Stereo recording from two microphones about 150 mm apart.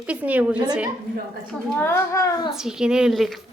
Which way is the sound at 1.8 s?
20° left (ahead or behind).